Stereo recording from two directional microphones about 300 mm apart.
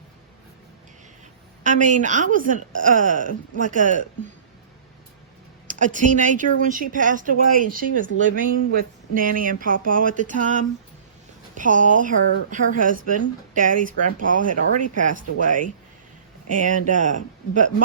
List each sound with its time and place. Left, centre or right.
1.6 s speech: right
5.6 s speech: right